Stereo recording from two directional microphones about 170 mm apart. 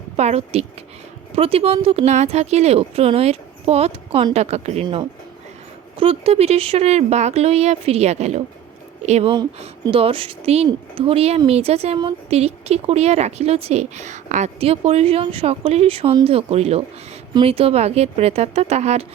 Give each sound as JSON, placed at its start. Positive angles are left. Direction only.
{"t": 0.2, "sound": "speech", "side_deg": -40}